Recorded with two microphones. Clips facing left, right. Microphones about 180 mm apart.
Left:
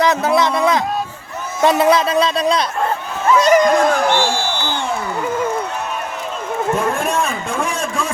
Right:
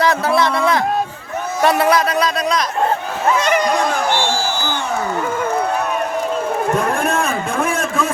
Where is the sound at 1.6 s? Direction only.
20° left (ahead or behind).